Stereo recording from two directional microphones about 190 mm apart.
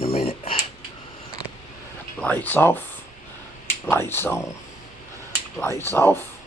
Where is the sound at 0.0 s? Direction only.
30° left (ahead or behind).